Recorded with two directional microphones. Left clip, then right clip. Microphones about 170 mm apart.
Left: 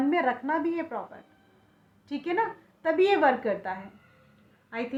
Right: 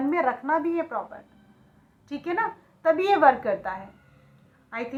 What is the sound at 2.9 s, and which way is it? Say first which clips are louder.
A woman's voice: right 3 dB; 45° left (ahead or behind).